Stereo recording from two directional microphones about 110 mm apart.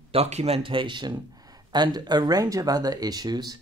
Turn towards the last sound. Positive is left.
turn(degrees=-40)  # may be behind; listen again after turning